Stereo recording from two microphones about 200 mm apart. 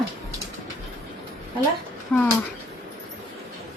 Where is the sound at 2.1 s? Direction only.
10° left (ahead or behind).